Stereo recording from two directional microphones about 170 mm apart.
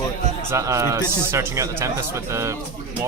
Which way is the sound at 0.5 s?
20° right (ahead or behind).